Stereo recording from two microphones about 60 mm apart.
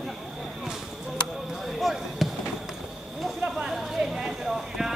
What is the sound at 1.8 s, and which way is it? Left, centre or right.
Basketball bounce, centre.